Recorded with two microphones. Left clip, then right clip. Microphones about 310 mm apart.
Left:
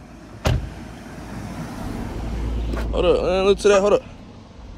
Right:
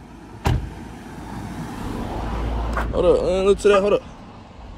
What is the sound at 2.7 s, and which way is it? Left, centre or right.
Speech, centre.